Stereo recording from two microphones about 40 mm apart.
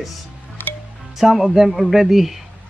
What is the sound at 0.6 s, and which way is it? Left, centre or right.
Music, left.